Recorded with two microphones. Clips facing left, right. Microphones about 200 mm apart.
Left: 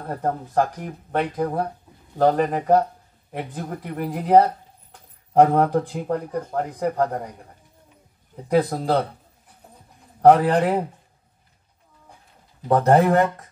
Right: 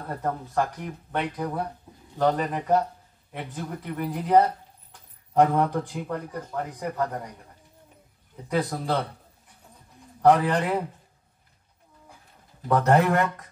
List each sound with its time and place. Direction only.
0.1 s speech: 40° left (ahead or behind)
8.5 s speech: 40° left (ahead or behind)
10.2 s speech: 50° left (ahead or behind)
12.6 s speech: 30° left (ahead or behind)